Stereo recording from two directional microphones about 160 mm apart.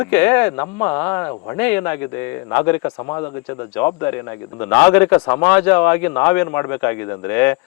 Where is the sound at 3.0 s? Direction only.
25° left (ahead or behind).